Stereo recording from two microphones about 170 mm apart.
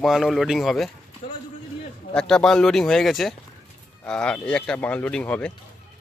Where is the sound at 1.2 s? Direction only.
35° left (ahead or behind).